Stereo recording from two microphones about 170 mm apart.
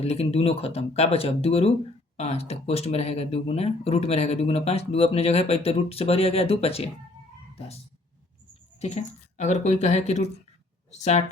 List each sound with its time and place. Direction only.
0.0 s speech: 35° left (ahead or behind)
8.8 s speech: 40° left (ahead or behind)